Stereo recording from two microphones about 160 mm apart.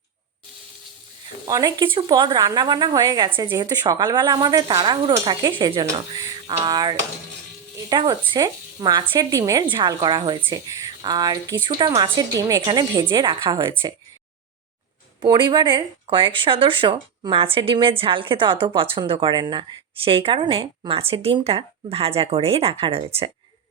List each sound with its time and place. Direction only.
1.5 s speech: 25° right (ahead or behind)
15.2 s speech: 30° right (ahead or behind)